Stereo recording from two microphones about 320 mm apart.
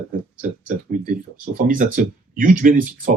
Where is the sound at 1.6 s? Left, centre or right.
Right.